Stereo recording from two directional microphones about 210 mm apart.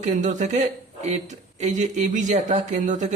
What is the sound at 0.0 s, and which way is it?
Speech, 35° right (ahead or behind).